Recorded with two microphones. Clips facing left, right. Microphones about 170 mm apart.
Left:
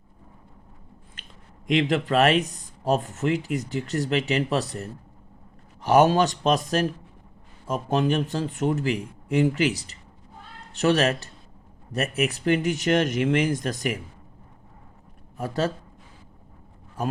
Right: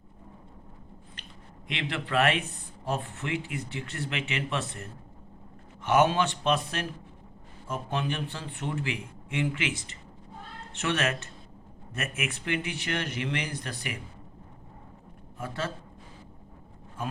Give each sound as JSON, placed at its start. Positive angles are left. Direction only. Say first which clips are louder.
{"t": 1.7, "sound": "speech", "louder": "left 8 dB", "side_deg": 40}
{"t": 15.4, "sound": "speech", "louder": "left 8 dB", "side_deg": 40}